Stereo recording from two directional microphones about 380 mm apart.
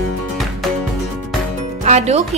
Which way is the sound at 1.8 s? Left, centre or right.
Centre.